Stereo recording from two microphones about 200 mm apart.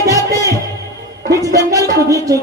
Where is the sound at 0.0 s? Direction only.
15° right (ahead or behind).